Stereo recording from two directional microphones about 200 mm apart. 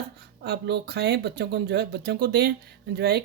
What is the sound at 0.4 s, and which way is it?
Speech, 55° right (ahead or behind).